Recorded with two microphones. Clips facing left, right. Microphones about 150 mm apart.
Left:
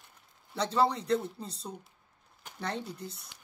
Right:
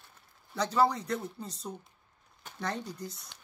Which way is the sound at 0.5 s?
30° left (ahead or behind).